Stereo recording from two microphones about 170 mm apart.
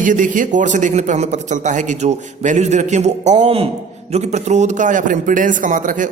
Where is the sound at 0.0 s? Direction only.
50° right (ahead or behind).